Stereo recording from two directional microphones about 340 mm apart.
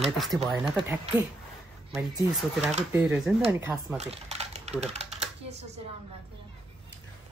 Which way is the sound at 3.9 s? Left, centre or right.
Centre.